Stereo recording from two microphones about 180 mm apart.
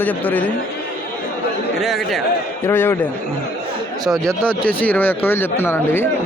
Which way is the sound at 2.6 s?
15° left (ahead or behind).